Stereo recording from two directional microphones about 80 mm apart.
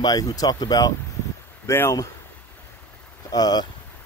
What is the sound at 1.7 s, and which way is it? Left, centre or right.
Speech, left.